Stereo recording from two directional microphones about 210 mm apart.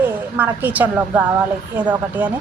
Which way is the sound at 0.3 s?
10° right (ahead or behind).